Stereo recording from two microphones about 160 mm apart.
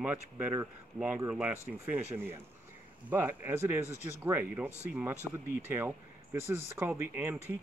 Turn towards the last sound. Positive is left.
turn(degrees=-15)  # may be behind; listen again after turning